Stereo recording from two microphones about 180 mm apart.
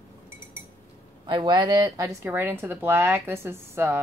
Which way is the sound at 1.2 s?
25° right (ahead or behind).